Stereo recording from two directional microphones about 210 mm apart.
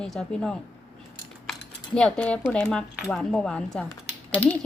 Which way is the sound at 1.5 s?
5° left (ahead or behind).